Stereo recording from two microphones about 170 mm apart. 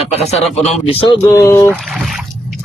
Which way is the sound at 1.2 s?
20° left (ahead or behind).